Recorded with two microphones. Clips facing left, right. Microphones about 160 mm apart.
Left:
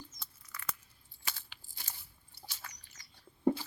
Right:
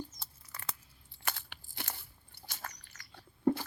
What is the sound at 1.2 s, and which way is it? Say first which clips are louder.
Crunch: right 6 dB; 60° right (ahead or behind).